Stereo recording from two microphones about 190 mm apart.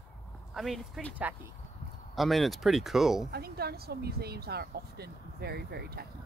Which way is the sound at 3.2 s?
55° right (ahead or behind).